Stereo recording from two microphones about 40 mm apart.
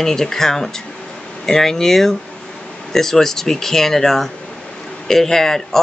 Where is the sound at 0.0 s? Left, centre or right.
Centre.